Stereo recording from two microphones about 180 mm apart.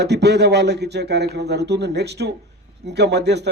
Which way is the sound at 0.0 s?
70° right (ahead or behind).